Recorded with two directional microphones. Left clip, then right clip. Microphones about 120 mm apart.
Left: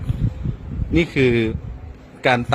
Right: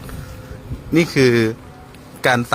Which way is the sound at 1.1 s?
30° left (ahead or behind).